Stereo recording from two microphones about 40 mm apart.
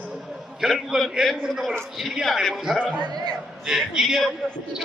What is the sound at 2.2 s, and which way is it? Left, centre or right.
Speech, centre.